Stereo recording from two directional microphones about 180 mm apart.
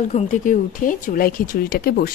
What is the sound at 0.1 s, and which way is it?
Speech, 45° left (ahead or behind).